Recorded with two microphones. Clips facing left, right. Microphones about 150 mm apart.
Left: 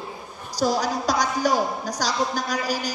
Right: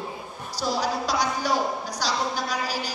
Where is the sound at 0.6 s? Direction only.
45° left (ahead or behind).